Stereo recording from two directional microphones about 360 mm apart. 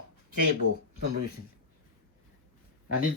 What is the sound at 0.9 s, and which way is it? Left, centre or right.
Speech, right.